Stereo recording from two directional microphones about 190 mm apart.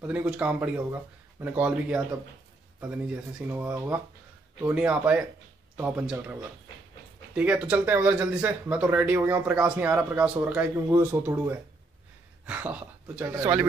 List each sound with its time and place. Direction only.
0.0 s speech: 5° right (ahead or behind)
7.3 s speech: 5° right (ahead or behind)